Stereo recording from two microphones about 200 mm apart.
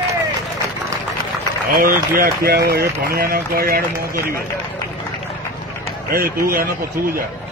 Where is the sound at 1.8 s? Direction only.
45° right (ahead or behind).